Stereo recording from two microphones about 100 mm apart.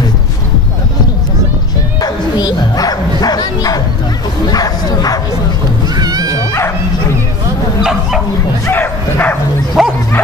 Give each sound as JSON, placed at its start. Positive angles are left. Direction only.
{"t": 2.0, "sound": "bow-wow", "side_deg": 45}
{"t": 5.9, "sound": "music", "side_deg": -40}
{"t": 8.6, "sound": "bow-wow", "side_deg": 20}
{"t": 9.8, "sound": "bow-wow", "side_deg": -5}